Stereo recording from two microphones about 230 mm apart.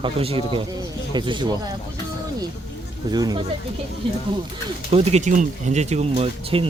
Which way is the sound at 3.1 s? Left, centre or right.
Centre.